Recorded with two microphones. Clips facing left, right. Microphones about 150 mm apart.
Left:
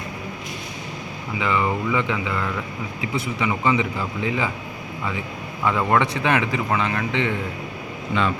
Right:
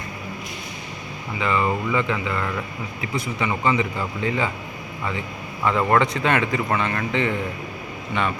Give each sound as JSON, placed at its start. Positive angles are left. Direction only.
{"t": 1.4, "sound": "speech", "side_deg": 15}
{"t": 5.6, "sound": "speech", "side_deg": 10}